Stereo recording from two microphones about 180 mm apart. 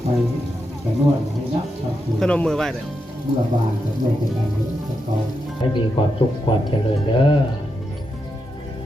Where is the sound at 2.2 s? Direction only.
5° left (ahead or behind).